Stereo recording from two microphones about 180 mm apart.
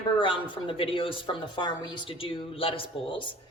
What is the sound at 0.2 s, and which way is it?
A woman's voice, 25° left (ahead or behind).